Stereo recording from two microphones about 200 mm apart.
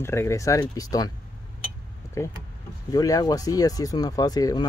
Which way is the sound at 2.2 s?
15° left (ahead or behind).